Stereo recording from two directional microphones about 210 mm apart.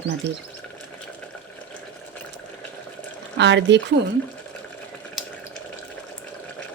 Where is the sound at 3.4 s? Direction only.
55° right (ahead or behind).